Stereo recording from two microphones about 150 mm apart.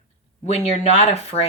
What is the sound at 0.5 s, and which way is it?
Speech, 45° left (ahead or behind).